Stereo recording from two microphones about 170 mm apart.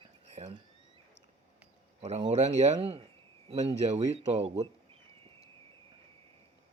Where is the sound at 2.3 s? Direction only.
40° right (ahead or behind).